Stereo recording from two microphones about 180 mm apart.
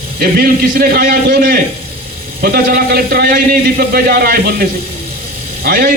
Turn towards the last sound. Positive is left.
turn(degrees=-60)  # may be behind; listen again after turning